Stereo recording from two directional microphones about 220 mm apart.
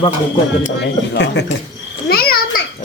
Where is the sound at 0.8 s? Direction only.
50° left (ahead or behind).